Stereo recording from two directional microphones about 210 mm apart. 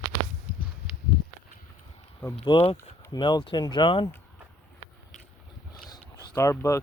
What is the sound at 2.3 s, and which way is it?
Speech, 25° left (ahead or behind).